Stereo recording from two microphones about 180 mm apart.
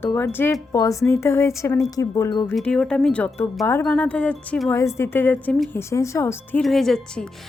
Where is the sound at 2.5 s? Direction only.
5° left (ahead or behind).